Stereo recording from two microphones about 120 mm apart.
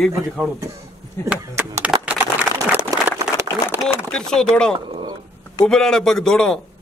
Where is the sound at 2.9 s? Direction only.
30° right (ahead or behind).